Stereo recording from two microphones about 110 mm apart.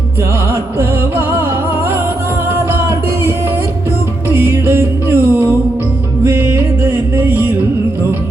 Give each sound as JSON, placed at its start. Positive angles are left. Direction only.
{"t": 0.5, "sound": "music", "side_deg": -20}
{"t": 2.5, "sound": "music", "side_deg": -25}